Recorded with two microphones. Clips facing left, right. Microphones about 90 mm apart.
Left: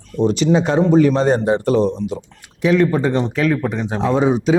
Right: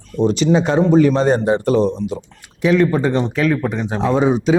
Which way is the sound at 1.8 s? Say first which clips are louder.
Even; 30° right (ahead or behind).